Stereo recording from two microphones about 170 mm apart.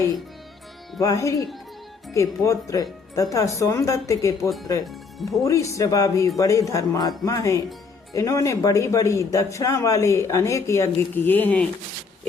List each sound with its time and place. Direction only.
0.9 s speech: 20° left (ahead or behind)
5.4 s speech: 20° left (ahead or behind)